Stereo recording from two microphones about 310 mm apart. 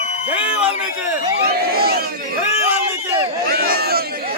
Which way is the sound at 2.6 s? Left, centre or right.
Centre.